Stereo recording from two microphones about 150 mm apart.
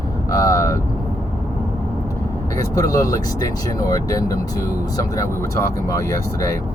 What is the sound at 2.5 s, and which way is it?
Speech, 25° left (ahead or behind).